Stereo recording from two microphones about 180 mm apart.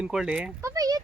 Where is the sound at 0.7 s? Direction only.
20° right (ahead or behind).